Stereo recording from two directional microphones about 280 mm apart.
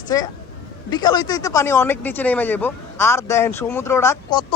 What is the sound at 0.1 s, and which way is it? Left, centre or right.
Speech, centre.